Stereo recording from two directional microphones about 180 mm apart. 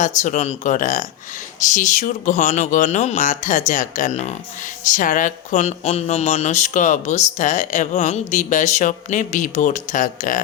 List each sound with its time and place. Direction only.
0.0 s speech: 45° left (ahead or behind)